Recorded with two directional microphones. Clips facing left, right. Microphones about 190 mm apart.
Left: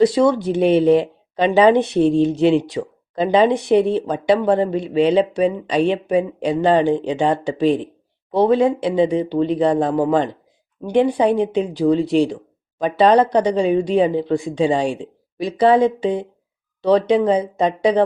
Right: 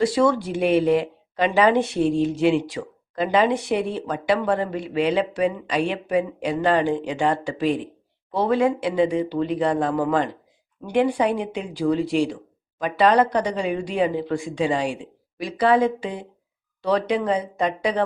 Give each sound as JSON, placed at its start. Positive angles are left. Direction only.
{"t": 0.0, "sound": "speech", "side_deg": 20}